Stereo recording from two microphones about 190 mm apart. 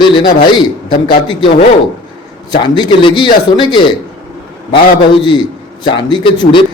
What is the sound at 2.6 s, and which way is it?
A man's voice, 25° left (ahead or behind).